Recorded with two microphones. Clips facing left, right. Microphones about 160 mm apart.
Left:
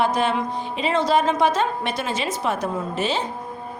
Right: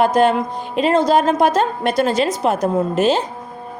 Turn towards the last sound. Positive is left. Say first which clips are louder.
# right 8 dB
turn(degrees=-45)  # may be behind; listen again after turning